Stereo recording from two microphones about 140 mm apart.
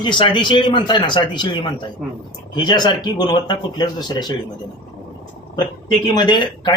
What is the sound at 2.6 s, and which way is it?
Speech, 30° left (ahead or behind).